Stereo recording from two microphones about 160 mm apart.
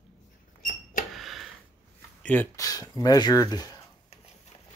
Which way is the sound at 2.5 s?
20° left (ahead or behind).